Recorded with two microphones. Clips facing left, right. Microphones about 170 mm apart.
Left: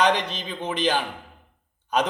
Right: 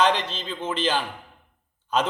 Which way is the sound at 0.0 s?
15° left (ahead or behind).